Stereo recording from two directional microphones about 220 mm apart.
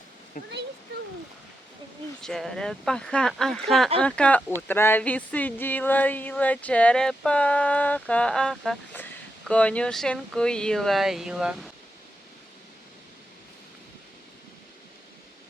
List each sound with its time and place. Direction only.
0.4 s speech: 40° left (ahead or behind)
2.2 s speech: centre (ahead or behind)
4.7 s a sound: 10° left (ahead or behind)
9.5 s speech: 5° left (ahead or behind)